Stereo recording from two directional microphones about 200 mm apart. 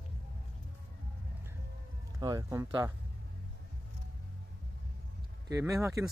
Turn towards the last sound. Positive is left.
turn(degrees=-15)  # may be behind; listen again after turning